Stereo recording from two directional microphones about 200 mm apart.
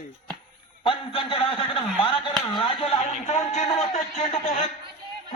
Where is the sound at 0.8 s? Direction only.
25° left (ahead or behind).